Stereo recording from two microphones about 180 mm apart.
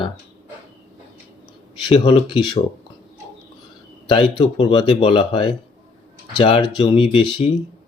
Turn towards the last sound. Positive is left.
turn(degrees=30)  # may be behind; listen again after turning